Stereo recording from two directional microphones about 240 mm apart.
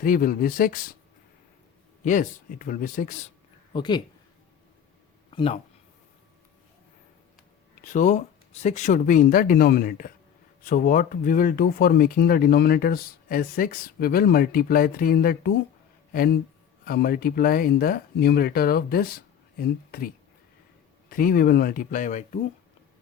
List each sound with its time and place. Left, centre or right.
0.0 s speech: left
2.0 s speech: left
3.7 s speech: centre
5.3 s speech: left
7.8 s speech: left
21.1 s speech: left